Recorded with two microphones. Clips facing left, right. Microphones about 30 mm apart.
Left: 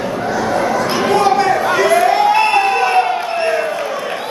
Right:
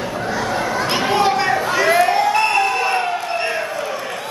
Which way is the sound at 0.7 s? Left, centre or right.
Right.